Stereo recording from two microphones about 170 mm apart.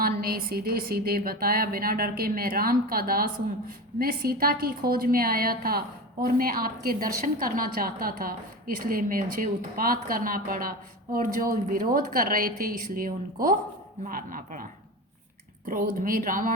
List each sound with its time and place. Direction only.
0.0 s a woman's voice: 60° right (ahead or behind)